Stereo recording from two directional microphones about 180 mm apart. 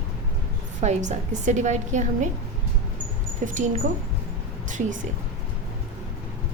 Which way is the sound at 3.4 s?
45° right (ahead or behind).